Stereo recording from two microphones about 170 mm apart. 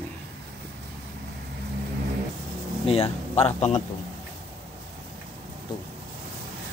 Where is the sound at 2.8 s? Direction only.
35° left (ahead or behind).